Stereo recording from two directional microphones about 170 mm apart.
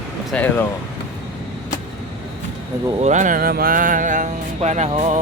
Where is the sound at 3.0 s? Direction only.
45° right (ahead or behind).